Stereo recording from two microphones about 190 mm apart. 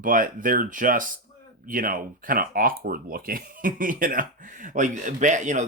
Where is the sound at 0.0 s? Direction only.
45° right (ahead or behind).